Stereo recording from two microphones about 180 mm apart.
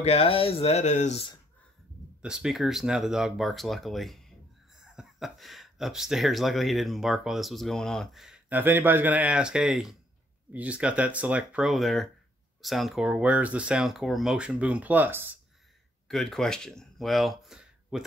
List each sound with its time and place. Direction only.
0.0 s speech: 30° left (ahead or behind)
2.2 s speech: 5° right (ahead or behind)
16.1 s speech: centre (ahead or behind)